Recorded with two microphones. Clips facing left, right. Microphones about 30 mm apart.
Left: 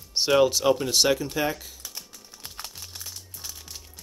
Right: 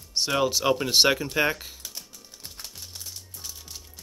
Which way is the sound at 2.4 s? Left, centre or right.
Left.